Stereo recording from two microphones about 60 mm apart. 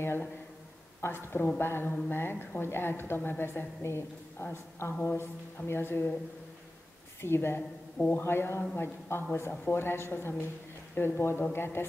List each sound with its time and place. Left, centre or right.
1.0 s a man's voice: left
7.2 s a man's voice: left